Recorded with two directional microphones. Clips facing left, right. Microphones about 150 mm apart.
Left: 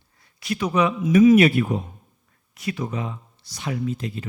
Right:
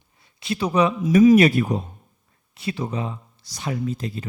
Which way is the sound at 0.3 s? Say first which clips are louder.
Right 1 dB; 25° right (ahead or behind).